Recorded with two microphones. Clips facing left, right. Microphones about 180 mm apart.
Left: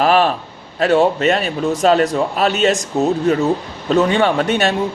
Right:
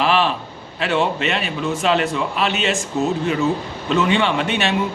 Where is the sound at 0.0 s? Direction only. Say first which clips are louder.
Left 4 dB; 45° left (ahead or behind).